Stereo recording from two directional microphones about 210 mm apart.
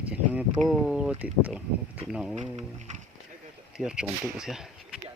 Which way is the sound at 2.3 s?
35° right (ahead or behind).